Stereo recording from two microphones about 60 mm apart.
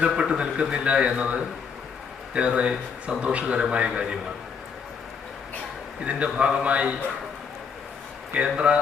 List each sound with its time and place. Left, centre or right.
0.1 s a man's voice: centre
6.1 s a man's voice: right
8.5 s a man's voice: centre